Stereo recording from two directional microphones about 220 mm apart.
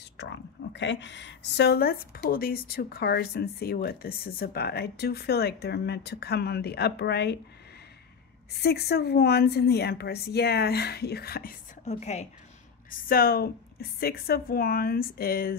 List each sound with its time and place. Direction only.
0.2 s speech: 55° left (ahead or behind)
8.5 s speech: 45° left (ahead or behind); by 12.3 s 30° left (ahead or behind)
13.1 s speech: 45° left (ahead or behind)